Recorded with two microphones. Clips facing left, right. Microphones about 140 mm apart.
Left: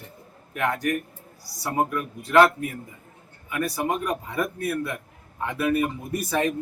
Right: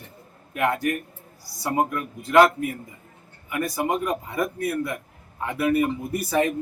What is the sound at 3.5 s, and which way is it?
A man's voice, 20° right (ahead or behind).